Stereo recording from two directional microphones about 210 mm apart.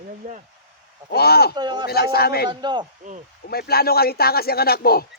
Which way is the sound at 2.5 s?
20° right (ahead or behind).